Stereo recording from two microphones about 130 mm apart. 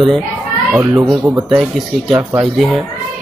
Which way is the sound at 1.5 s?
Centre (ahead or behind).